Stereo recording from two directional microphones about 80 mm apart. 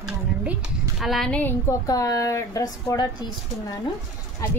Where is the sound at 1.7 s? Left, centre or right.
Left.